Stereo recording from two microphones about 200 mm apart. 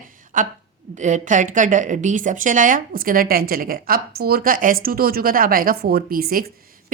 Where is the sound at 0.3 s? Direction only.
40° right (ahead or behind).